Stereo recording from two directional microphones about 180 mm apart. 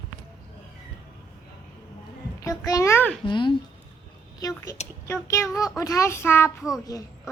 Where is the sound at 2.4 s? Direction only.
20° left (ahead or behind).